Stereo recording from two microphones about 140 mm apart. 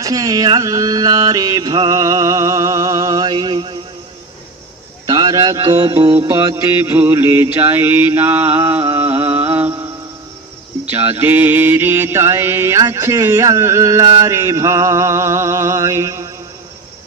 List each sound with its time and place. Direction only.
0.0 s mantra: 25° right (ahead or behind)
5.0 s mantra: 25° right (ahead or behind)
10.9 s mantra: 15° right (ahead or behind)